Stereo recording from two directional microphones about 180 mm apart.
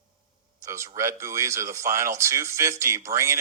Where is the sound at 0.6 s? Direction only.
15° right (ahead or behind).